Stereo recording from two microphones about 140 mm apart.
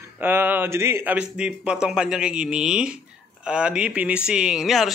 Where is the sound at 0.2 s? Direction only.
15° right (ahead or behind).